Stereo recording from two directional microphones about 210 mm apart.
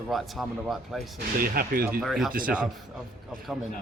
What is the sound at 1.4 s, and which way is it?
Speech, 45° right (ahead or behind).